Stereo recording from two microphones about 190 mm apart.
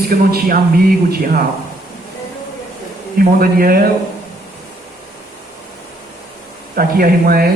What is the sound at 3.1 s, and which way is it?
Speech, 50° right (ahead or behind).